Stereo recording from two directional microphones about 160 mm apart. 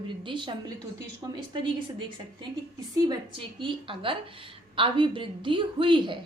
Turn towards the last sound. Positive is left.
turn(degrees=-30)  # may be behind; listen again after turning